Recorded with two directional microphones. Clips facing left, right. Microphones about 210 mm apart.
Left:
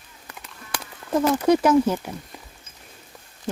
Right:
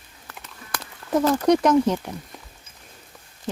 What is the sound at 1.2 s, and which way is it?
Speech, 5° left (ahead or behind).